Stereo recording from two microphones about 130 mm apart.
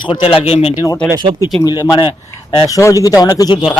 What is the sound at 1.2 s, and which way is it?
Speech, 40° right (ahead or behind).